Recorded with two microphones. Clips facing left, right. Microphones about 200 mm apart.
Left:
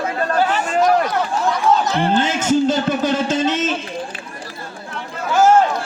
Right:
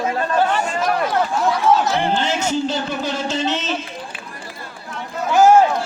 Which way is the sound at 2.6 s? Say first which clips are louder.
Left 5 dB; 50° left (ahead or behind).